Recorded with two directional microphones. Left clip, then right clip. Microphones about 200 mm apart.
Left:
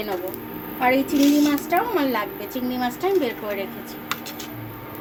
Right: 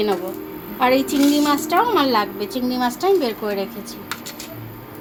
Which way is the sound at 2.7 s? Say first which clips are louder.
Right 4 dB; 45° right (ahead or behind).